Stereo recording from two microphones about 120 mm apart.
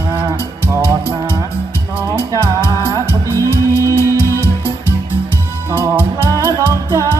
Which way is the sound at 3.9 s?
20° right (ahead or behind).